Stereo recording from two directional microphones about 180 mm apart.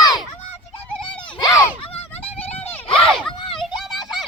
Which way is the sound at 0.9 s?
5° left (ahead or behind).